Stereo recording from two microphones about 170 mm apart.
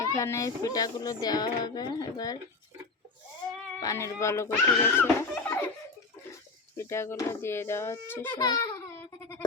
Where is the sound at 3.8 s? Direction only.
15° left (ahead or behind).